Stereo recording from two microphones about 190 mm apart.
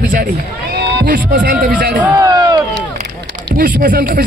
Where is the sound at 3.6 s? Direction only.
45° right (ahead or behind).